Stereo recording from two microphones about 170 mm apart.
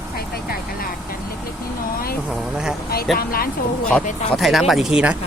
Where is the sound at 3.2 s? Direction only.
60° left (ahead or behind).